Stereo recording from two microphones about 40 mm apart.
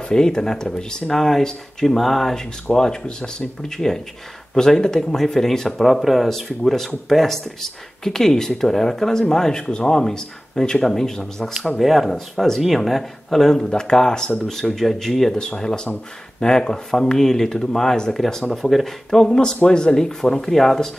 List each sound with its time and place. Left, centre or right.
0.1 s speech: centre
5.9 s speech: centre
11.8 s speech: centre
15.3 s speech: centre
18.5 s speech: centre